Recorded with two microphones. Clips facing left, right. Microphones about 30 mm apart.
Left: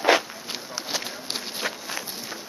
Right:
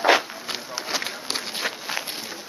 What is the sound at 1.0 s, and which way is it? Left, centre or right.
Run, right.